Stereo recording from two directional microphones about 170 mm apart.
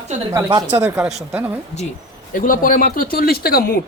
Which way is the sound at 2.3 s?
55° left (ahead or behind).